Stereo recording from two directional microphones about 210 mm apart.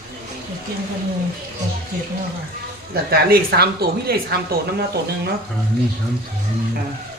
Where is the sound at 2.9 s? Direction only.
50° right (ahead or behind).